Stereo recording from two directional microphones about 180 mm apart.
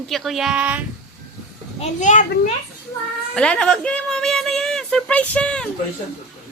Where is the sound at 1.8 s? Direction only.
45° left (ahead or behind).